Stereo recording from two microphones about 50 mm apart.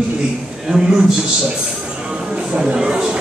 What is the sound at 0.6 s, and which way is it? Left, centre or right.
Speech, centre.